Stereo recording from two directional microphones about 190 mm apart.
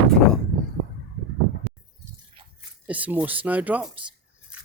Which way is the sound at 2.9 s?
10° right (ahead or behind).